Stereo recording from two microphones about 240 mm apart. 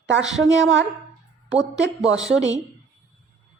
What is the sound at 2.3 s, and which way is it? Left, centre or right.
Speech, right.